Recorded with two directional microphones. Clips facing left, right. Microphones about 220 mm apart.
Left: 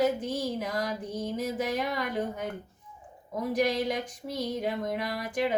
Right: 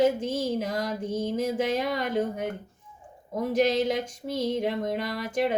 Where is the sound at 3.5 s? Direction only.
25° right (ahead or behind).